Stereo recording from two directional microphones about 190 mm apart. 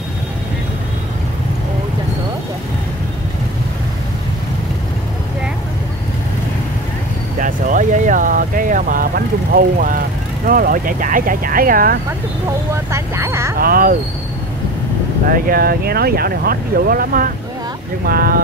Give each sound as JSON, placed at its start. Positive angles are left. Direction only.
{"t": 7.3, "sound": "speech", "side_deg": -45}
{"t": 12.7, "sound": "speech", "side_deg": -15}
{"t": 13.6, "sound": "speech", "side_deg": -50}
{"t": 15.2, "sound": "speech", "side_deg": -50}